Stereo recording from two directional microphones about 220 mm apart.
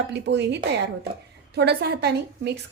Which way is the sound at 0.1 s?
50° right (ahead or behind).